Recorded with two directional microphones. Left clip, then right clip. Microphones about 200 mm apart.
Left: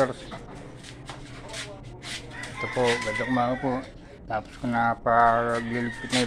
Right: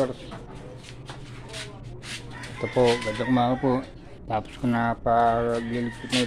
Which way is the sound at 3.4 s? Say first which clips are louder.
Right 2 dB; 30° right (ahead or behind).